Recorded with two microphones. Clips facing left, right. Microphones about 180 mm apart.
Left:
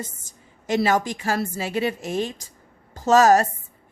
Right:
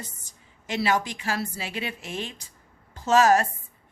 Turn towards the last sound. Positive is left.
turn(degrees=40)  # may be behind; listen again after turning